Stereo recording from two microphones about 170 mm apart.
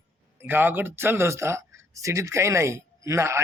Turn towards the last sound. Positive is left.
turn(degrees=-15)  # may be behind; listen again after turning